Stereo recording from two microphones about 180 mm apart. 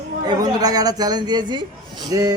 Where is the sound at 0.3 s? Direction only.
20° right (ahead or behind).